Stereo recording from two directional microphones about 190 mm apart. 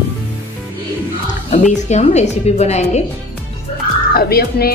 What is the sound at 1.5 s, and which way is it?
A woman's voice, 40° left (ahead or behind).